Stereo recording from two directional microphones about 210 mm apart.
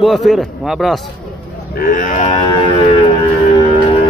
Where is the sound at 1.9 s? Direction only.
35° left (ahead or behind).